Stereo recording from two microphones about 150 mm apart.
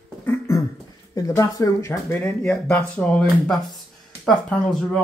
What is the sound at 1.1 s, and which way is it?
Speech, 20° left (ahead or behind).